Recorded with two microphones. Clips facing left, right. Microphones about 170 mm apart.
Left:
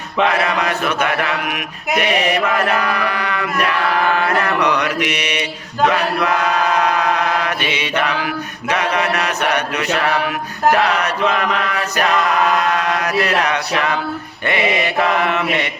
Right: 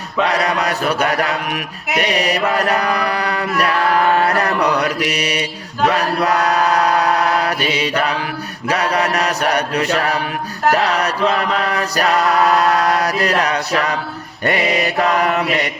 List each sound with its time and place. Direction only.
0.3 s chant: 35° right (ahead or behind)
4.2 s mantra: 35° right (ahead or behind)
8.7 s chant: 35° right (ahead or behind)